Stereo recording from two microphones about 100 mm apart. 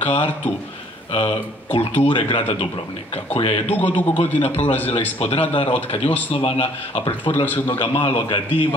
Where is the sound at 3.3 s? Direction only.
65° left (ahead or behind).